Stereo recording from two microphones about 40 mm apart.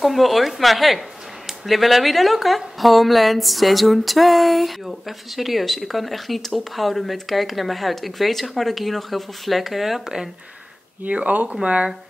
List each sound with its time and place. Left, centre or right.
0.0 s a woman's voice: centre
11.1 s speech: right